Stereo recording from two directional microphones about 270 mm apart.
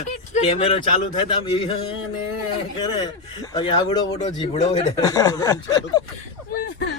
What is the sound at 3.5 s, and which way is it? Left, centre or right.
Speech, centre.